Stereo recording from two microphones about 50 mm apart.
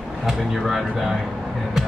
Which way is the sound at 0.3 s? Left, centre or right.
Centre.